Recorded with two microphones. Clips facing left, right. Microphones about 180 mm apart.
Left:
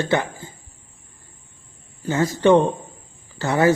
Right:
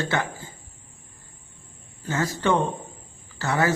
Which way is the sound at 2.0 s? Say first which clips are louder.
Left 7 dB; 15° left (ahead or behind).